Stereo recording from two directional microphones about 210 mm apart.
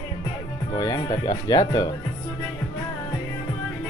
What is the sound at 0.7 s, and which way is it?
Speech, 20° left (ahead or behind).